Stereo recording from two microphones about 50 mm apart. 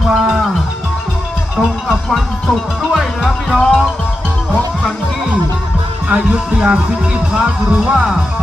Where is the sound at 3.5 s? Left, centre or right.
Centre.